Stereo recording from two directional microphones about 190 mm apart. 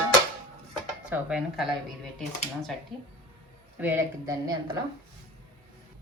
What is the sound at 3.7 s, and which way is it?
Speech, 10° right (ahead or behind).